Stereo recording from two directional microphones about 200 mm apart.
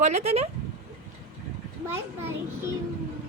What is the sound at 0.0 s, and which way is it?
Speech, 35° right (ahead or behind).